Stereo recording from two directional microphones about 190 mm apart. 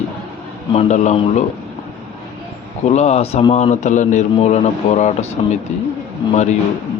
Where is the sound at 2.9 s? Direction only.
35° left (ahead or behind).